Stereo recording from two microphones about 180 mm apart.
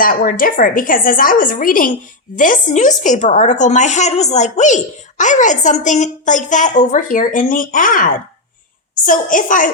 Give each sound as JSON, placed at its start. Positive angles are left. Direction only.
{"t": 0.0, "sound": "a woman's voice", "side_deg": 50}